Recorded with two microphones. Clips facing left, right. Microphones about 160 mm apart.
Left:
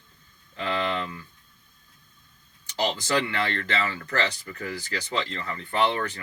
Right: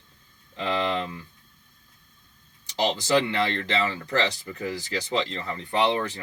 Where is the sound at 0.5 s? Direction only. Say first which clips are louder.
Right 2 dB; 25° right (ahead or behind).